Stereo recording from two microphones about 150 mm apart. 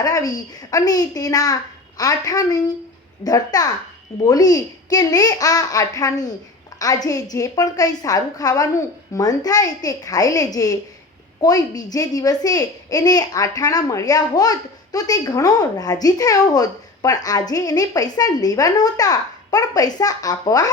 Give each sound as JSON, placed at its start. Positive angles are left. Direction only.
{"t": 0.0, "sound": "a woman's voice", "side_deg": 25}